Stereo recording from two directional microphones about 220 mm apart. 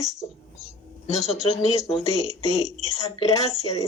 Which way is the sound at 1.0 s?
30° left (ahead or behind).